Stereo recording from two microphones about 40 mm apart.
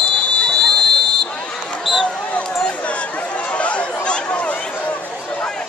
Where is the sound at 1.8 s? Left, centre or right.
Centre.